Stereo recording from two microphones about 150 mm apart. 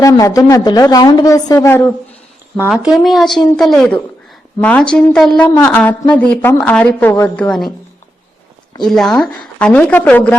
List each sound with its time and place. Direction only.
0.0 s a woman's voice: 20° left (ahead or behind)
2.6 s a woman's voice: 5° right (ahead or behind)
8.8 s a woman's voice: centre (ahead or behind)